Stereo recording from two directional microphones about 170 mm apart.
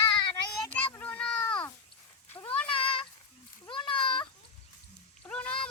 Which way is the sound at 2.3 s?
35° left (ahead or behind).